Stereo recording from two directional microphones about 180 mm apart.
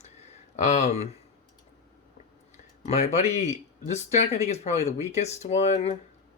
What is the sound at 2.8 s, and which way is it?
Speech, 35° left (ahead or behind).